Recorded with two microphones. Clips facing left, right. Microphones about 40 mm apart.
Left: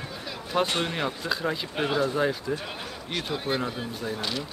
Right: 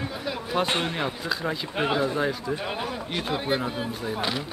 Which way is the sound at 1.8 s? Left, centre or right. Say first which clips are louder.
Right 2 dB; centre.